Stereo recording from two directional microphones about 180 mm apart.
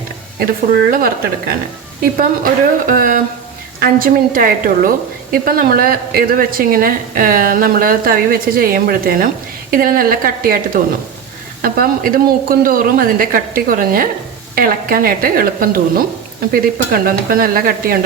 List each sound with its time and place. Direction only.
0.3 s a woman's voice: 55° right (ahead or behind)